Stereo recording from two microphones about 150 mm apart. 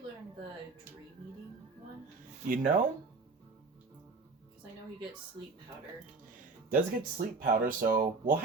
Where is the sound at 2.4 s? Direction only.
65° right (ahead or behind).